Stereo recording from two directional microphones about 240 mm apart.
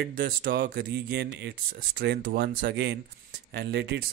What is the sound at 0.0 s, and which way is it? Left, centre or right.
Speech, right.